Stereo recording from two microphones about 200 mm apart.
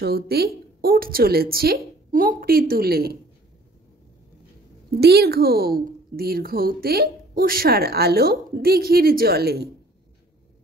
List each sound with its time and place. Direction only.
0.0 s a woman's voice: 50° right (ahead or behind)
4.9 s a woman's voice: 55° right (ahead or behind)